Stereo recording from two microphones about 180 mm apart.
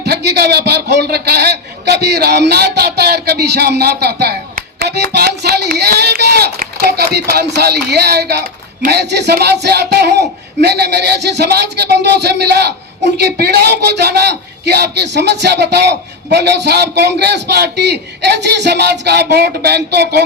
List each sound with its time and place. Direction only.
0.0 s a man's voice: 65° right (ahead or behind)